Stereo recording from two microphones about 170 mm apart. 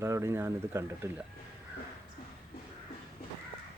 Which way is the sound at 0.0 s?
15° right (ahead or behind).